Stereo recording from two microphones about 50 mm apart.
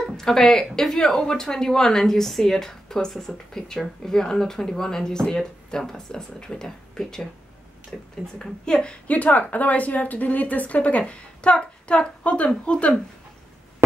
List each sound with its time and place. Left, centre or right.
0.2 s speech: centre
7.9 s a woman's voice: centre
9.1 s a woman's voice: left